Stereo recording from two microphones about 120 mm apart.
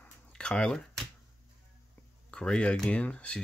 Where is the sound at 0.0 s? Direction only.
10° left (ahead or behind).